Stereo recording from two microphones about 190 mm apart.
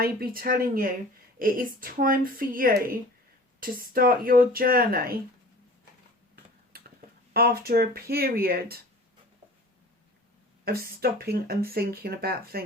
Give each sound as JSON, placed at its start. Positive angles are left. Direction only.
{"t": 0.0, "sound": "speech", "side_deg": -50}
{"t": 6.3, "sound": "a sound", "side_deg": -55}
{"t": 7.3, "sound": "speech", "side_deg": -55}
{"t": 10.7, "sound": "speech", "side_deg": -55}